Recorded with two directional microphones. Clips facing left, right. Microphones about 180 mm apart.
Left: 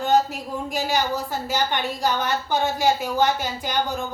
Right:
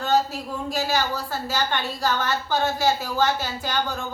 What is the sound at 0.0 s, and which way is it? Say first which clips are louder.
A woman's voice: left 2 dB; 15° left (ahead or behind).